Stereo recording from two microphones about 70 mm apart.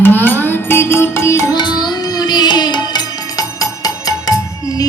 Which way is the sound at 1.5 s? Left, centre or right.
Left.